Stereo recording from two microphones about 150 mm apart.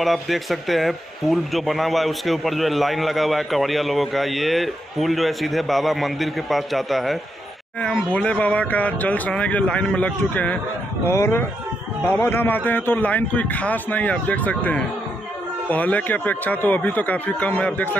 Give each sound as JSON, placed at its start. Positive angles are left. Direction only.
{"t": 0.0, "sound": "a man's voice", "side_deg": 0}